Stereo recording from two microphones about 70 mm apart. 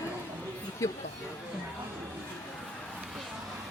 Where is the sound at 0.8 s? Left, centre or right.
Left.